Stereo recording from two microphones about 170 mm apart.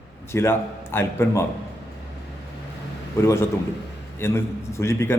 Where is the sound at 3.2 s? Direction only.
15° left (ahead or behind).